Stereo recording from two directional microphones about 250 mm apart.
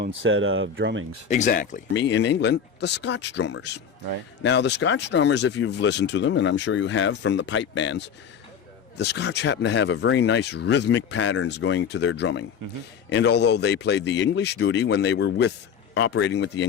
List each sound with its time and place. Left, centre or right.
0.0 s speech: right
1.3 s speech: left
1.9 s speech: left